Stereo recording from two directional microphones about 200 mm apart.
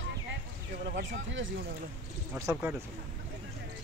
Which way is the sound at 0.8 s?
55° right (ahead or behind).